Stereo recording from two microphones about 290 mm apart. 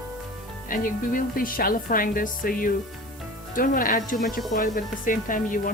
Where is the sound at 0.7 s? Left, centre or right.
Left.